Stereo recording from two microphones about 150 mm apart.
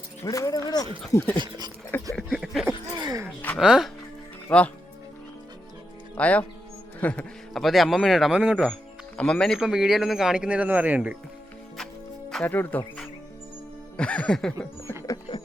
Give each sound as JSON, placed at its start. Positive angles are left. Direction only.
{"t": 0.3, "sound": "speech", "side_deg": 20}
{"t": 1.4, "sound": "speech", "side_deg": -30}
{"t": 2.1, "sound": "a sound", "side_deg": 0}
{"t": 3.0, "sound": "a sound", "side_deg": -25}
{"t": 3.6, "sound": "a man's voice", "side_deg": -5}
{"t": 4.4, "sound": "speech", "side_deg": 10}
{"t": 6.1, "sound": "music", "side_deg": 10}
{"t": 7.0, "sound": "a man's voice", "side_deg": 10}
{"t": 12.3, "sound": "speech", "side_deg": 10}
{"t": 13.9, "sound": "music", "side_deg": 5}
{"t": 15.0, "sound": "a sound", "side_deg": 25}